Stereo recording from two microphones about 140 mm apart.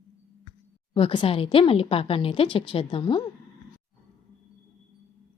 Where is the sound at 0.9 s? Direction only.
40° left (ahead or behind).